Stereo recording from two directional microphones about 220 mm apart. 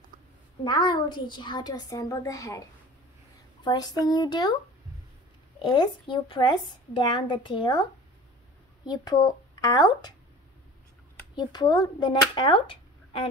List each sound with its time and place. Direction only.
0.7 s a woman's voice: 20° left (ahead or behind)
3.6 s a woman's voice: 20° left (ahead or behind)
5.6 s a woman's voice: 20° left (ahead or behind)
8.8 s speech: 20° left (ahead or behind)
11.3 s a woman's voice: 20° left (ahead or behind)